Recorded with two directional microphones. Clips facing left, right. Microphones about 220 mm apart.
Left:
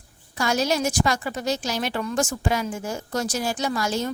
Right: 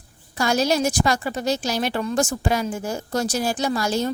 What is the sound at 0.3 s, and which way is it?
A woman's voice, 35° right (ahead or behind).